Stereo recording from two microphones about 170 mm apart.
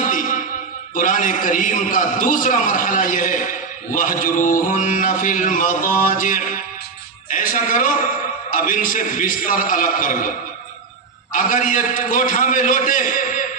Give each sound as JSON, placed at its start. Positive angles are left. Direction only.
{"t": 0.0, "sound": "a sound", "side_deg": 50}
{"t": 0.9, "sound": "a man's voice", "side_deg": 50}
{"t": 11.3, "sound": "a man's voice", "side_deg": 50}